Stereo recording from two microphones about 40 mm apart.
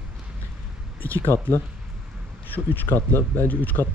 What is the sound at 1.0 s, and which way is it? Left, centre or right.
Speech, left.